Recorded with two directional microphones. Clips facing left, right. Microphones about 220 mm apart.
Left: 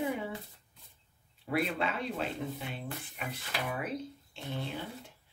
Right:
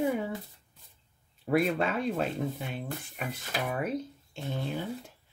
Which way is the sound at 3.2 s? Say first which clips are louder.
Right 4 dB; 45° right (ahead or behind).